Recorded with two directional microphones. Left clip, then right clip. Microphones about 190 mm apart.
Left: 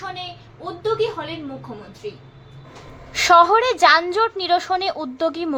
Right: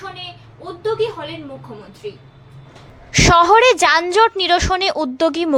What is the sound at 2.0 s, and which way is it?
Speech, centre (ahead or behind).